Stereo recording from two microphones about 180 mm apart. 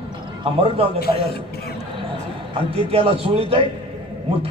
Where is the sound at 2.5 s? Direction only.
30° right (ahead or behind).